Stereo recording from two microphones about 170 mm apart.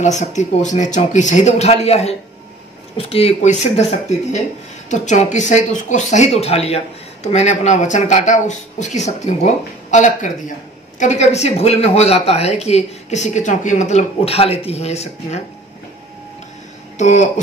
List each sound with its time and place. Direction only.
0.0 s speech: 45° left (ahead or behind)
4.8 s speech: 45° left (ahead or behind)
17.0 s speech: 45° left (ahead or behind)